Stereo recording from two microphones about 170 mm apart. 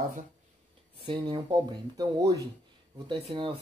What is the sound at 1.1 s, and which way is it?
Speech, 30° right (ahead or behind).